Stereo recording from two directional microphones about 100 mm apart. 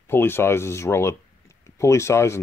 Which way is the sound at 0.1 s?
25° left (ahead or behind).